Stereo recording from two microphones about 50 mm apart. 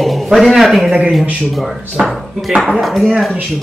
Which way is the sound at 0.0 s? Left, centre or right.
Centre.